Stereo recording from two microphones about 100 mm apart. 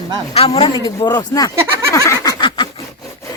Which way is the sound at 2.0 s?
35° left (ahead or behind).